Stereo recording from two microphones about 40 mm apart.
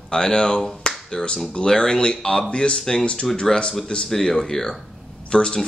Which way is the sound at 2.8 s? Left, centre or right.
Centre.